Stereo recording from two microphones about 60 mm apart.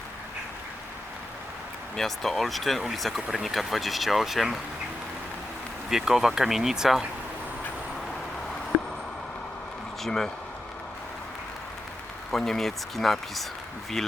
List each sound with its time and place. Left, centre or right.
2.0 s speech: centre
5.9 s speech: centre
10.0 s speech: centre
12.3 s speech: centre